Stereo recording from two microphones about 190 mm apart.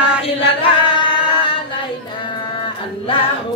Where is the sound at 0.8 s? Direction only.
25° left (ahead or behind).